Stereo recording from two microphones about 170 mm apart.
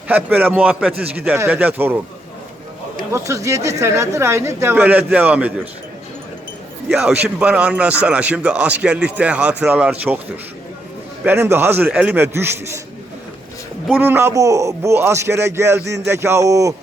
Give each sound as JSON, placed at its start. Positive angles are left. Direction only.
{"t": 0.1, "sound": "a man's voice", "side_deg": -10}
{"t": 3.1, "sound": "a man's voice", "side_deg": -20}
{"t": 7.3, "sound": "a man's voice", "side_deg": -5}
{"t": 11.2, "sound": "a man's voice", "side_deg": -15}
{"t": 13.8, "sound": "a man's voice", "side_deg": -10}